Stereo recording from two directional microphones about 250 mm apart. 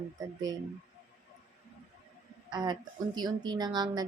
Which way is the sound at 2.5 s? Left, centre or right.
Centre.